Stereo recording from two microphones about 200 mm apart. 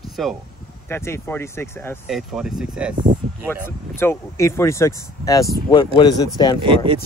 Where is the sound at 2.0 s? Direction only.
5° right (ahead or behind).